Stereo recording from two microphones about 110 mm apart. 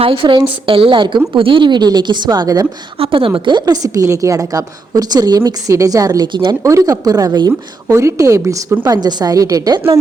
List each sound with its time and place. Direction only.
0.0 s a woman's voice: 55° right (ahead or behind); by 2.6 s 35° right (ahead or behind)
3.0 s a woman's voice: 55° right (ahead or behind)
6.6 s a woman's voice: 30° right (ahead or behind)